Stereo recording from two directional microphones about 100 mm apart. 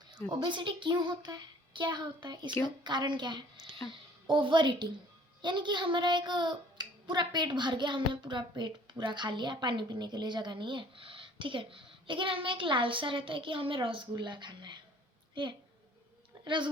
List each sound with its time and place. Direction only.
0.3 s a child's voice: 50° right (ahead or behind)